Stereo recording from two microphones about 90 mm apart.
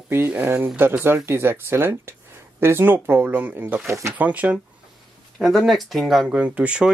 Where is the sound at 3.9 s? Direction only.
35° right (ahead or behind).